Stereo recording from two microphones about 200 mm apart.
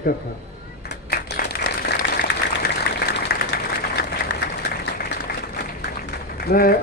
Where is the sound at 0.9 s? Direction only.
55° left (ahead or behind).